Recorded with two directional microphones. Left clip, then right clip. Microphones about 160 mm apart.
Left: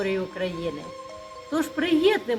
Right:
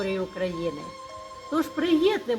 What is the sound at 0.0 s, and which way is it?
Speech, 20° left (ahead or behind).